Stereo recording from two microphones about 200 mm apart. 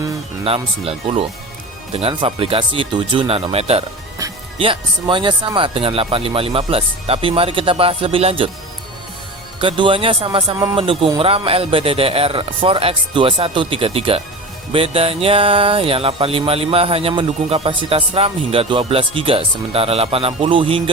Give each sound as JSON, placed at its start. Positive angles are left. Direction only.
{"t": 0.4, "sound": "speech", "side_deg": -30}
{"t": 4.2, "sound": "music", "side_deg": -15}
{"t": 4.5, "sound": "speech", "side_deg": -25}
{"t": 9.6, "sound": "speech", "side_deg": -25}